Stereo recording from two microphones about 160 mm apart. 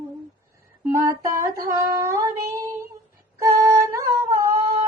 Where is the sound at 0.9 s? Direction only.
20° right (ahead or behind).